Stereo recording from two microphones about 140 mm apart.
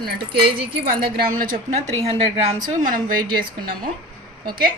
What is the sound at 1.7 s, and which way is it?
Speech, 45° right (ahead or behind).